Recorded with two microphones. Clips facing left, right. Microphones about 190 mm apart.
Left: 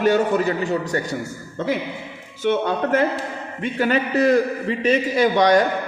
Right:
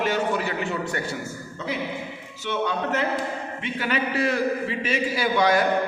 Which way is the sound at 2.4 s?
50° left (ahead or behind).